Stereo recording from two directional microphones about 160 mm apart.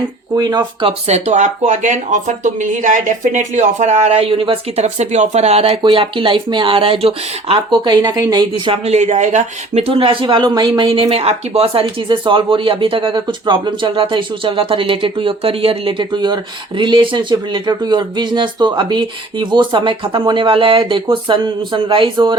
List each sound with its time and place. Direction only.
0.3 s speech: 25° right (ahead or behind)
4.9 s speech: 45° right (ahead or behind); by 22.4 s 30° right (ahead or behind)